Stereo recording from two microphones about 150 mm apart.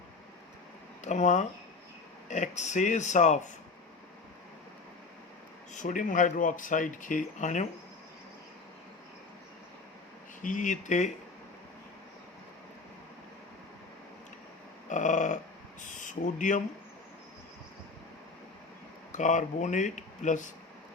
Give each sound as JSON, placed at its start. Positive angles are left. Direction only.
{"t": 1.0, "sound": "speech", "side_deg": 50}
{"t": 5.7, "sound": "speech", "side_deg": 60}
{"t": 10.4, "sound": "speech", "side_deg": 55}
{"t": 14.8, "sound": "a sound", "side_deg": 55}
{"t": 16.0, "sound": "speech", "side_deg": 55}
{"t": 19.1, "sound": "speech", "side_deg": 55}